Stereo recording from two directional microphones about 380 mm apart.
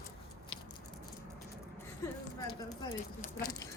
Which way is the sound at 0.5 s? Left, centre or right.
Centre.